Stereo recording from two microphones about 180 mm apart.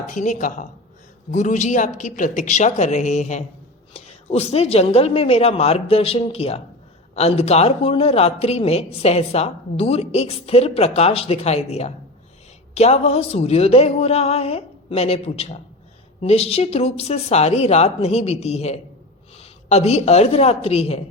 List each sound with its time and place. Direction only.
0.1 s a woman's voice: 45° left (ahead or behind)